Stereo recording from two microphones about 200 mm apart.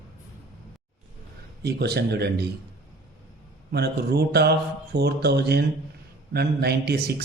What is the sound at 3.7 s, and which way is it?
A man's voice, 55° right (ahead or behind).